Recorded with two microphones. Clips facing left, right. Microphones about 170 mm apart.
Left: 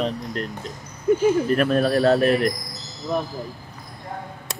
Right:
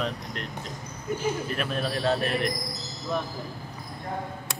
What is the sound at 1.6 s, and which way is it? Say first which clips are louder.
Speech: left 10 dB; 50° left (ahead or behind).